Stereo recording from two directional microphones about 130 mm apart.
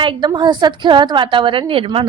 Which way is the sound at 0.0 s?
35° right (ahead or behind).